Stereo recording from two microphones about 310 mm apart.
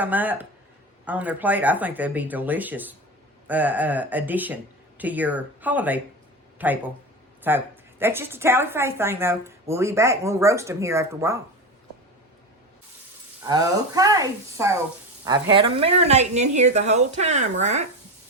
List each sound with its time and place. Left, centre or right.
0.0 s speech: centre
13.4 s a woman's voice: centre